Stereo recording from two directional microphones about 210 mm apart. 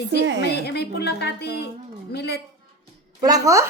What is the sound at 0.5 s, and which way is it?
A woman's voice, 50° left (ahead or behind).